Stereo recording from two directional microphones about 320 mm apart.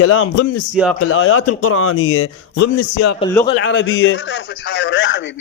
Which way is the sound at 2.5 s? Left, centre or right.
Left.